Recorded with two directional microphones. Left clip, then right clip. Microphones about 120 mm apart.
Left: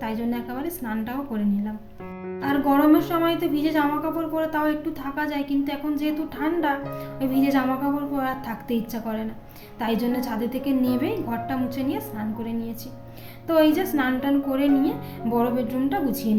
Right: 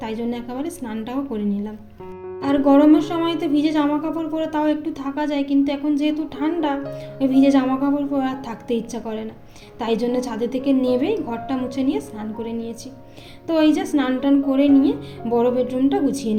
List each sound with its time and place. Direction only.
0.0 s speech: 15° right (ahead or behind)
2.4 s a woman's voice: 20° right (ahead or behind)